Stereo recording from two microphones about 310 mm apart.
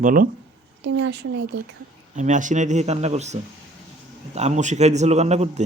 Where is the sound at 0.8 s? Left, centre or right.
Right.